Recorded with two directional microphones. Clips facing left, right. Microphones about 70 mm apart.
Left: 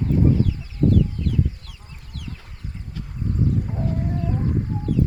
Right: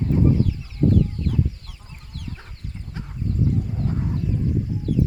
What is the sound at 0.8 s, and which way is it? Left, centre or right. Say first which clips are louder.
Chicken: even; left.